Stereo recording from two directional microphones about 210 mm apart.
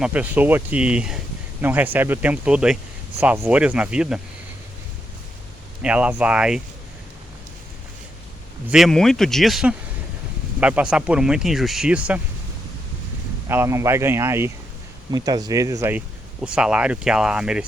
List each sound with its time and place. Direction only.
0.0 s speech: 5° right (ahead or behind)
5.8 s speech: 5° right (ahead or behind)
8.7 s speech: centre (ahead or behind)
13.5 s speech: 10° right (ahead or behind)